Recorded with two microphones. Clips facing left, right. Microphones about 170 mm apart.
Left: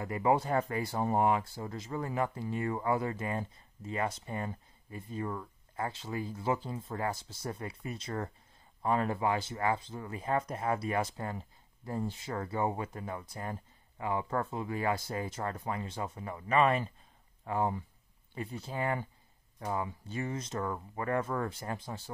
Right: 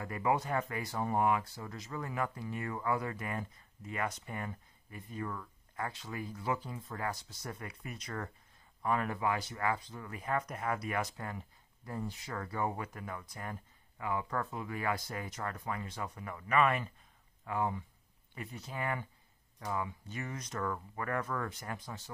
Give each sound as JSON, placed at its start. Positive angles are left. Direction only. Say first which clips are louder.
{"t": 0.0, "sound": "speech", "louder": "left 4 dB", "side_deg": 25}